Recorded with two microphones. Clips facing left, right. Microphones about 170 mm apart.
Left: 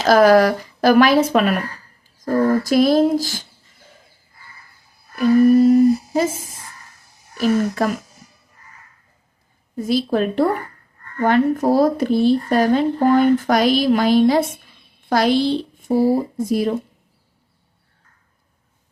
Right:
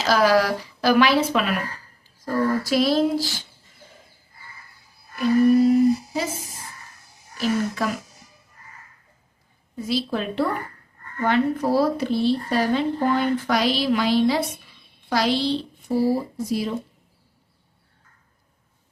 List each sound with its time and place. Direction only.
0.0 s speech: 50° left (ahead or behind)
5.1 s a sound: 40° left (ahead or behind)
7.3 s speech: 50° left (ahead or behind)
9.7 s speech: 45° left (ahead or behind)